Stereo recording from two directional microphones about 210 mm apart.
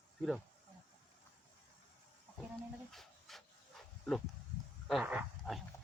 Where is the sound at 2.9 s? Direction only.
Centre (ahead or behind).